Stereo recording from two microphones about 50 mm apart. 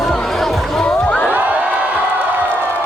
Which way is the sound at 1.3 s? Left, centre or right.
Right.